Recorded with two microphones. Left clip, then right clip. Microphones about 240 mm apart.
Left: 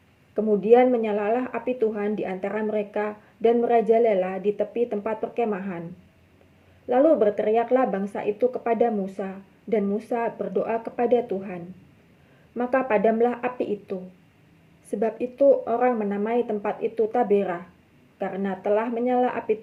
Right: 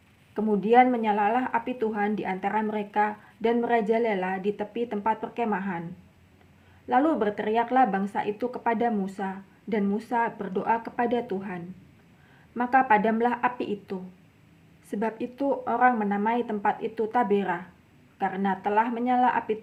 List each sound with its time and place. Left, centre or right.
0.6 s a woman's voice: centre
6.8 s a woman's voice: centre